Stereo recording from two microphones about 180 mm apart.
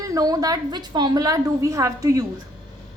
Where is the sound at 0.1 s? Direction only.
20° right (ahead or behind).